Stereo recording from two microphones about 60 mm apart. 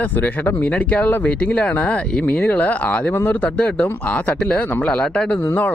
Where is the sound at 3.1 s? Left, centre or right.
Left.